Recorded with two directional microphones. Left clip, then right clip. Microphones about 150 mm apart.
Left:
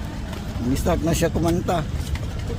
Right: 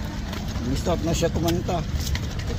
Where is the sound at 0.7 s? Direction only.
65° left (ahead or behind).